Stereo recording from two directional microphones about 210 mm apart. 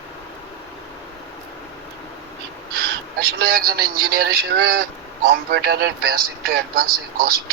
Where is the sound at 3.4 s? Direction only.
45° right (ahead or behind).